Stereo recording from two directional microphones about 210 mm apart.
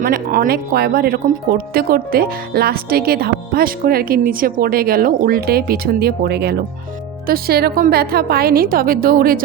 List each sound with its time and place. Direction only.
0.0 s speech: 45° right (ahead or behind)